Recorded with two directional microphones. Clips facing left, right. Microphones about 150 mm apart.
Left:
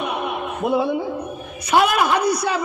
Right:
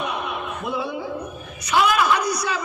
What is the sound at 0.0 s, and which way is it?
Chuckle, 55° left (ahead or behind).